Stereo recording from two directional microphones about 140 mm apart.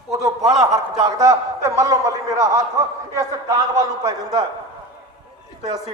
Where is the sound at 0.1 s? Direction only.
25° right (ahead or behind).